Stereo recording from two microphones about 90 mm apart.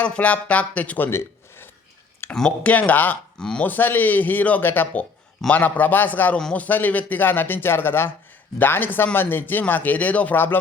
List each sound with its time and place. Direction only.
0.0 s speech: 15° left (ahead or behind)
2.3 s speech: 10° left (ahead or behind)